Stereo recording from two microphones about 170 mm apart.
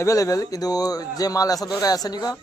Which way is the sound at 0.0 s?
20° left (ahead or behind).